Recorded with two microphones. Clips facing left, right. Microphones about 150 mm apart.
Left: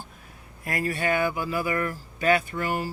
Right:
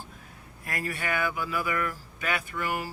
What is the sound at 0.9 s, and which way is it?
Speech, 30° left (ahead or behind).